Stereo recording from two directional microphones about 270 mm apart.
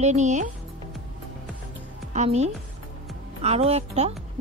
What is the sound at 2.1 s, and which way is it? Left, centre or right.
A woman's voice, right.